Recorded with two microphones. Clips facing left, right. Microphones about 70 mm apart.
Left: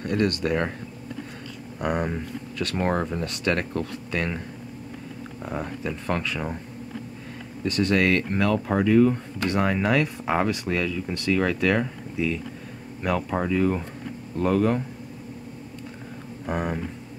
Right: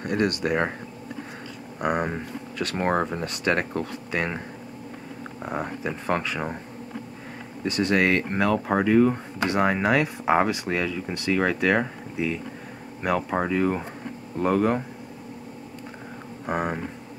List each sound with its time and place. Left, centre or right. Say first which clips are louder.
0.0 s speech: even; centre
1.8 s speech: right 1 dB; centre
2.6 s speech: even; centre
2.9 s speech: right 1 dB; centre
5.4 s speech: right 1 dB; centre
7.6 s speech: even; centre
16.4 s speech: right 1 dB; centre